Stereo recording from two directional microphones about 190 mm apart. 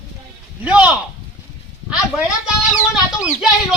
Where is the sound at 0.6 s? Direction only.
5° right (ahead or behind).